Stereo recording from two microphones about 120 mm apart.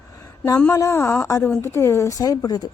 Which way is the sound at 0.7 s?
25° left (ahead or behind).